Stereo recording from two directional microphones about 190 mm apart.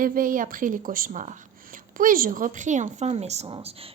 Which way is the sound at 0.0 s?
45° right (ahead or behind).